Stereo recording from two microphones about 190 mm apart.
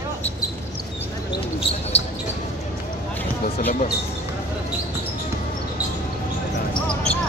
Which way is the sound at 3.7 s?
45° left (ahead or behind).